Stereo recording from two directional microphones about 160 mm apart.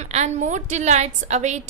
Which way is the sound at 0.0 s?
45° right (ahead or behind).